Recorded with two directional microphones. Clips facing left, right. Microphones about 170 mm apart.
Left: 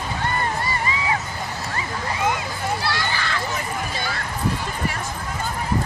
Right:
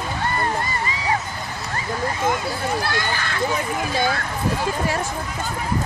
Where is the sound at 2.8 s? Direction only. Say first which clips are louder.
Right 1 dB; 50° right (ahead or behind).